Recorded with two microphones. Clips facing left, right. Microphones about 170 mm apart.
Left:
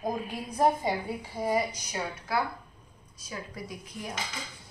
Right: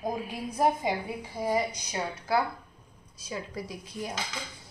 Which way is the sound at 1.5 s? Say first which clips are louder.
Right 1 dB; 20° right (ahead or behind).